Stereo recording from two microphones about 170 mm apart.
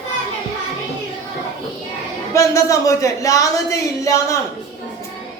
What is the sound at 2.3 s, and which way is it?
Speech, 15° left (ahead or behind).